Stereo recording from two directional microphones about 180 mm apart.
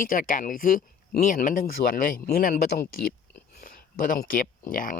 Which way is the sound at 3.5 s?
55° left (ahead or behind).